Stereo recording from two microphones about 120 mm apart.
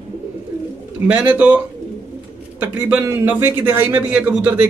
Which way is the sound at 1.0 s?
15° right (ahead or behind).